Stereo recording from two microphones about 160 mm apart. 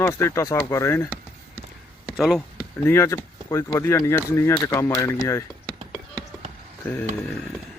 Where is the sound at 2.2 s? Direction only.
Centre (ahead or behind).